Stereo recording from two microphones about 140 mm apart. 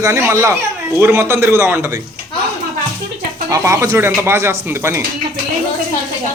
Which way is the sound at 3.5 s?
20° right (ahead or behind).